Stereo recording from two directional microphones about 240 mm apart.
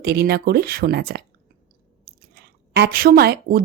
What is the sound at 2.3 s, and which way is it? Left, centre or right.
Speech, right.